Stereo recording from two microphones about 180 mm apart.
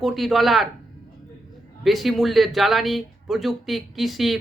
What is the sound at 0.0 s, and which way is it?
Speech, centre (ahead or behind).